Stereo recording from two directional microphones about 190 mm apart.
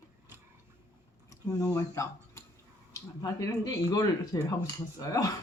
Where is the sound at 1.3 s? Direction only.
15° left (ahead or behind).